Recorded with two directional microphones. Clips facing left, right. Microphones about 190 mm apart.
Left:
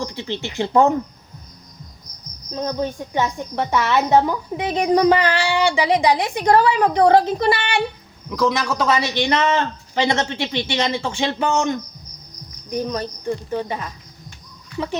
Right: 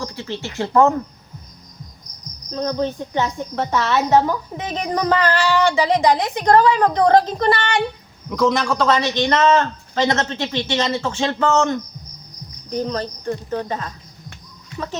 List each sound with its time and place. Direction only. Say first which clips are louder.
0.0 s a woman's voice: left 1 dB; 15° left (ahead or behind)
2.8 s a woman's voice: right 1 dB; 15° left (ahead or behind)